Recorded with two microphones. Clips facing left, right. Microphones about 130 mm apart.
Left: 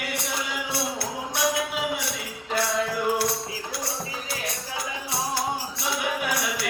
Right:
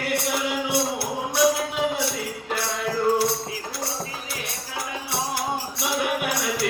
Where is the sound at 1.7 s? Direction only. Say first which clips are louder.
Right 4 dB; 25° right (ahead or behind).